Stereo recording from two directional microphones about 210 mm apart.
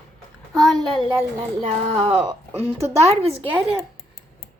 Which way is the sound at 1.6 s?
30° right (ahead or behind).